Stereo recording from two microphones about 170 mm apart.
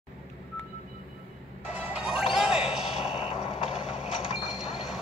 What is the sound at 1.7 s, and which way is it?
Smash, 5° right (ahead or behind).